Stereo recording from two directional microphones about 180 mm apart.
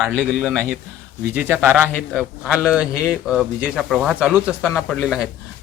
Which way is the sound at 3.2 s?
5° right (ahead or behind).